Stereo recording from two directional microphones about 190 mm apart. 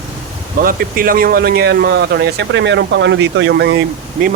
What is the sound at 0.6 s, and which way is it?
Speech, 50° right (ahead or behind).